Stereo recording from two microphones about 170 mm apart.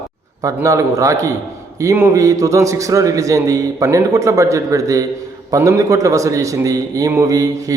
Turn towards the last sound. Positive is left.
turn(degrees=-20)  # may be behind; listen again after turning